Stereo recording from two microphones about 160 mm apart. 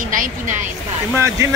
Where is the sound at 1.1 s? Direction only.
15° right (ahead or behind).